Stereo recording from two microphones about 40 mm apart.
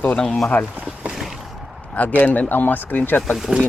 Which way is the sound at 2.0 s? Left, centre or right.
Left.